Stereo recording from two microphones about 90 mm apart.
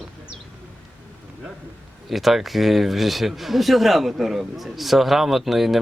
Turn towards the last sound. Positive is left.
turn(degrees=0)  # may be behind; listen again after turning